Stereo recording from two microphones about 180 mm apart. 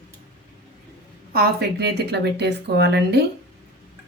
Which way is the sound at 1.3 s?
60° right (ahead or behind).